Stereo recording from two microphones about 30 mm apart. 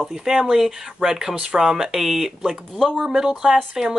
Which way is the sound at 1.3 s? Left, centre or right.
Right.